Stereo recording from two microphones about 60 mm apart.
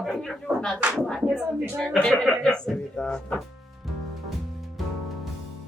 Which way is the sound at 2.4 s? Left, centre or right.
Centre.